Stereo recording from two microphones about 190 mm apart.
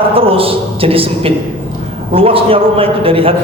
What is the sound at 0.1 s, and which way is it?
A man's voice, 30° right (ahead or behind).